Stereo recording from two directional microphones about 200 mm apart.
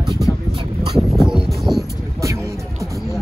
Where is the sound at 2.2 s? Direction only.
15° right (ahead or behind).